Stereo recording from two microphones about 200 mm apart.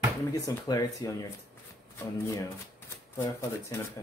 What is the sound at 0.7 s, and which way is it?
Speech, 15° left (ahead or behind).